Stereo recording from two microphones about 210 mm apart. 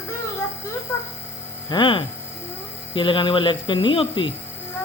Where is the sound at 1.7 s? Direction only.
25° left (ahead or behind).